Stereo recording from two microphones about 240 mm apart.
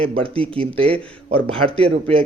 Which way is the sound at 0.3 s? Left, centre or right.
Right.